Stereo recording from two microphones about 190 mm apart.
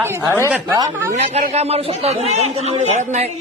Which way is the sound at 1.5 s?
35° right (ahead or behind).